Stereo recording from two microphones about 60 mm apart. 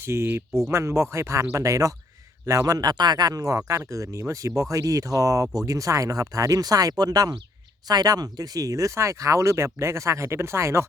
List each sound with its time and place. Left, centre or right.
0.0 s speech: right
1.5 s speech: right
2.5 s speech: right
3.7 s speech: right